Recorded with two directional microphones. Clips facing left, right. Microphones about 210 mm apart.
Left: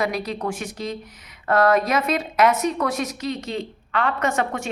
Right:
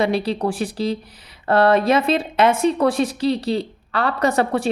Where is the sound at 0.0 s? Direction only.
30° right (ahead or behind).